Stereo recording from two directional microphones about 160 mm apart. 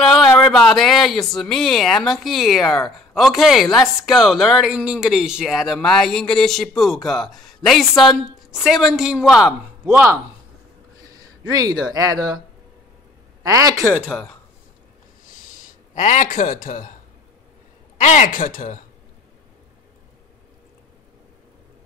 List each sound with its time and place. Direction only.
0.0 s a sound: centre (ahead or behind)
0.4 s speech: 5° left (ahead or behind)
9.8 s speech: 15° right (ahead or behind)
13.4 s speech: 20° right (ahead or behind)
15.9 s a man's voice: 50° left (ahead or behind)
17.9 s a man's voice: 50° left (ahead or behind)